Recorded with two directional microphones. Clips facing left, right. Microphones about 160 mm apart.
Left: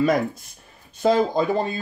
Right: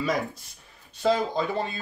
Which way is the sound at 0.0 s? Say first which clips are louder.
Left 7 dB; 55° left (ahead or behind).